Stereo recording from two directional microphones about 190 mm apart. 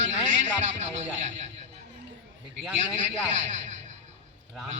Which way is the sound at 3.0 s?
40° right (ahead or behind).